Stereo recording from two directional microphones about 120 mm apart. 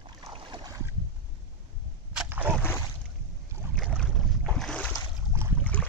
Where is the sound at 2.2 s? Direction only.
15° right (ahead or behind).